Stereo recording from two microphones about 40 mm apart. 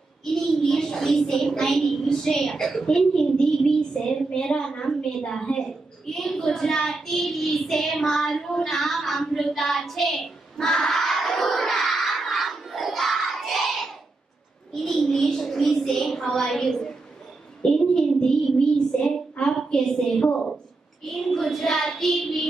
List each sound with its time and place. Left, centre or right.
0.2 s a sound: centre
1.4 s a woman's voice: centre
6.4 s child singing: centre
14.7 s a woman's voice: centre
17.6 s child singing: centre
21.0 s a woman's voice: centre